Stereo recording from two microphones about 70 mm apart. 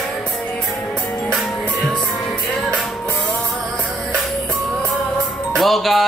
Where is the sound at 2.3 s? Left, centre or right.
Centre.